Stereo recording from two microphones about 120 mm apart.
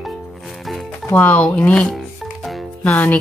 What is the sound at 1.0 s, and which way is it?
Speech, 15° left (ahead or behind).